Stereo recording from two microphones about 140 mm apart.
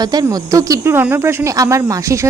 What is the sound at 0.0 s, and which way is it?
A woman's voice, 30° right (ahead or behind).